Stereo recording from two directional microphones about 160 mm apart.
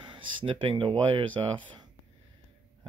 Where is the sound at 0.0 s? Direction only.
35° right (ahead or behind).